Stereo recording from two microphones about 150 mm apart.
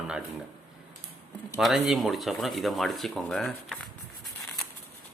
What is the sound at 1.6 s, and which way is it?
Speech, centre (ahead or behind).